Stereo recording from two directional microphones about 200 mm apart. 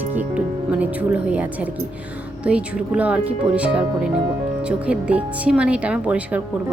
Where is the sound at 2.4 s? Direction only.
5° right (ahead or behind).